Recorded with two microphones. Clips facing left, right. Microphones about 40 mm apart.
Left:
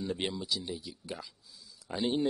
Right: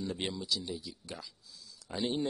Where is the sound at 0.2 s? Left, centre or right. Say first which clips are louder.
Left 1 dB; centre.